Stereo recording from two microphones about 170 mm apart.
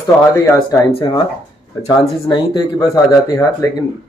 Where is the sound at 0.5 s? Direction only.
25° left (ahead or behind).